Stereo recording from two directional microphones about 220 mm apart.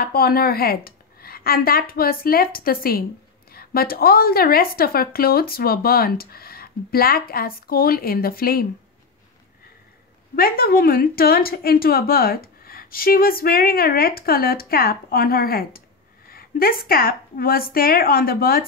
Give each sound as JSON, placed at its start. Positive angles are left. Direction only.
{"t": 0.0, "sound": "a woman's voice", "side_deg": 45}
{"t": 10.3, "sound": "a woman's voice", "side_deg": 40}